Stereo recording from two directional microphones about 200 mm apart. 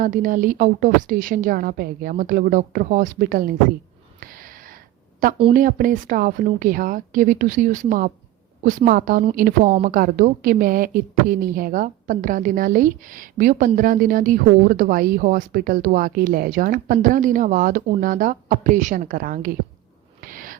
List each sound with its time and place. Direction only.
0.0 s speech: 40° right (ahead or behind)
4.2 s a sound: 45° right (ahead or behind)
5.5 s speech: 45° right (ahead or behind)
20.2 s owl: 45° right (ahead or behind)